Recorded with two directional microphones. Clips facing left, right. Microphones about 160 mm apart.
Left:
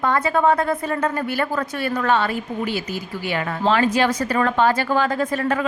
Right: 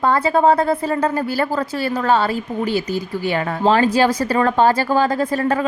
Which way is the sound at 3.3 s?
40° right (ahead or behind).